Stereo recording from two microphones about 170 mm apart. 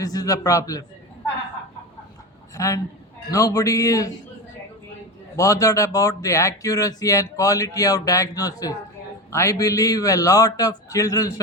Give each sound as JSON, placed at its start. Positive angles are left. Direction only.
{"t": 0.0, "sound": "speech", "side_deg": 20}
{"t": 2.6, "sound": "speech", "side_deg": 20}
{"t": 5.4, "sound": "speech", "side_deg": 20}